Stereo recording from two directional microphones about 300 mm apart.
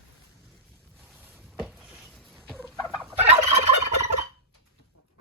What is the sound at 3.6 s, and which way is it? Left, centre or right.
Fowl, left.